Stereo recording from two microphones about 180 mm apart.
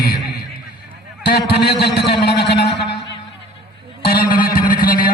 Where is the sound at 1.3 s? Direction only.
65° left (ahead or behind).